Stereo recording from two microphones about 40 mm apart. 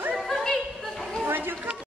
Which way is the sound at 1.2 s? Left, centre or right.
Right.